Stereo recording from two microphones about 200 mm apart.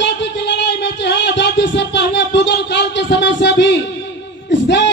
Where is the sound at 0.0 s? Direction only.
60° left (ahead or behind).